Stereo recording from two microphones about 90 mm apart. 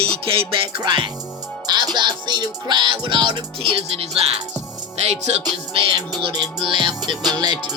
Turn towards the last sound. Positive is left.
turn(degrees=-50)  # may be behind; listen again after turning